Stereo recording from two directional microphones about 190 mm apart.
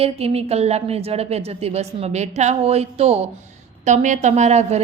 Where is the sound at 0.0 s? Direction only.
30° right (ahead or behind).